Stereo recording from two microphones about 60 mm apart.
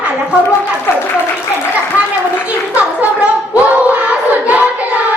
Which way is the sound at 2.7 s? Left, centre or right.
Right.